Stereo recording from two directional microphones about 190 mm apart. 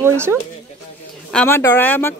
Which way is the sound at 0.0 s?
10° right (ahead or behind).